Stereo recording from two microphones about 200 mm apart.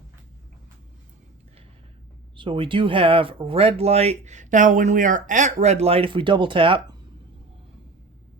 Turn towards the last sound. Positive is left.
turn(degrees=-25)  # may be behind; listen again after turning